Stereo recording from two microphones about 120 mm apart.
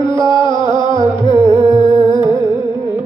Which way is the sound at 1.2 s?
25° right (ahead or behind).